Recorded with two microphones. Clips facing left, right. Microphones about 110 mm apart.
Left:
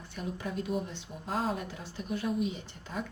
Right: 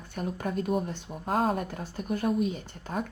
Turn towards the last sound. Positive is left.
turn(degrees=-50)  # may be behind; listen again after turning